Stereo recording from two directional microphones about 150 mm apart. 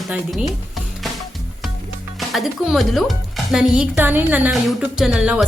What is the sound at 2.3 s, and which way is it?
Speech, centre (ahead or behind).